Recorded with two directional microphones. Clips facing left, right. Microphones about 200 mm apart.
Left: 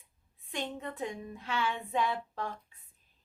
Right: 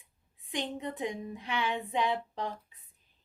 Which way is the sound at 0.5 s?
15° right (ahead or behind).